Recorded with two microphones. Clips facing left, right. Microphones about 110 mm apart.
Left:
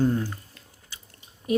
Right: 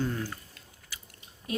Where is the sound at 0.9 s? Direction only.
25° left (ahead or behind).